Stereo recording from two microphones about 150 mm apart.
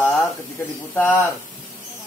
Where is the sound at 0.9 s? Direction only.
10° left (ahead or behind).